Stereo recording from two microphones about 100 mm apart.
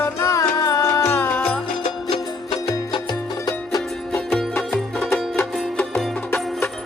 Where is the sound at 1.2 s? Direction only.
10° left (ahead or behind).